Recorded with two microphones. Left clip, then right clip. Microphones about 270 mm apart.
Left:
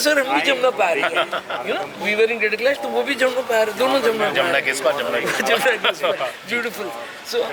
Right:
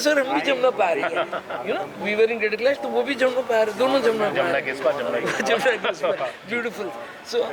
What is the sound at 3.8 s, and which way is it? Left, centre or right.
Speech, centre.